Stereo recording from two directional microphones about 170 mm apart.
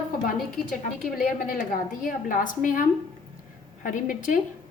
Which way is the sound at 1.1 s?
55° left (ahead or behind).